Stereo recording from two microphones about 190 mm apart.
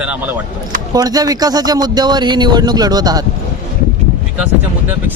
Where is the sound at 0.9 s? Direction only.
20° right (ahead or behind).